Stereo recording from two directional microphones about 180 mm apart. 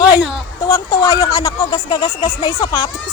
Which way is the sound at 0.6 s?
20° left (ahead or behind).